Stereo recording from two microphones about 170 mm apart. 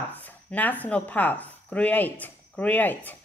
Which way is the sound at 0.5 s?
10° left (ahead or behind).